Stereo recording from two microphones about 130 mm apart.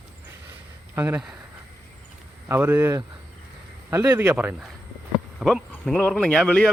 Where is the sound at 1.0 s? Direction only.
15° right (ahead or behind).